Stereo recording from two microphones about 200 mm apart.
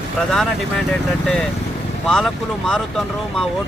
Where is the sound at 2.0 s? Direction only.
5° left (ahead or behind).